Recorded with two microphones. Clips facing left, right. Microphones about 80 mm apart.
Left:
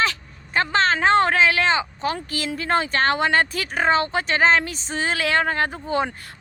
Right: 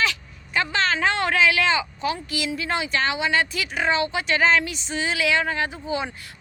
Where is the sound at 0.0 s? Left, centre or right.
Left.